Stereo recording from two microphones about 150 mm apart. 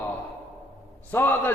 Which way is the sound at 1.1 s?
15° left (ahead or behind).